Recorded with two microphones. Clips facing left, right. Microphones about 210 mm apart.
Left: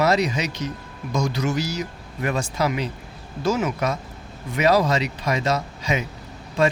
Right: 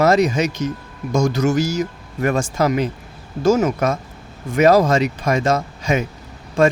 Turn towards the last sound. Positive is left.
turn(degrees=-45)  # may be behind; listen again after turning